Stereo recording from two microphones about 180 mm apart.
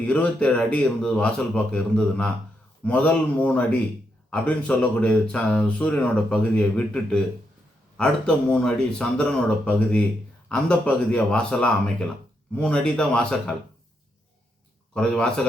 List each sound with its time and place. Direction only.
0.0 s speech: 5° left (ahead or behind)
14.9 s speech: 5° left (ahead or behind)